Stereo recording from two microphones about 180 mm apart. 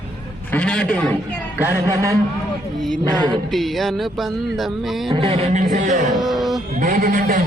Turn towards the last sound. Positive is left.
turn(degrees=-50)  # may be behind; listen again after turning